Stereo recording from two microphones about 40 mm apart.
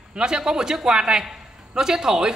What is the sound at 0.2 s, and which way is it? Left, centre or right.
A woman's voice, centre.